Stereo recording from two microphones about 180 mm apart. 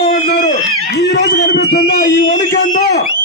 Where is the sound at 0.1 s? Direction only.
55° left (ahead or behind).